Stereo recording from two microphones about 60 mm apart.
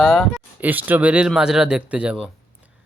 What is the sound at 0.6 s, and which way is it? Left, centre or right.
Speech, right.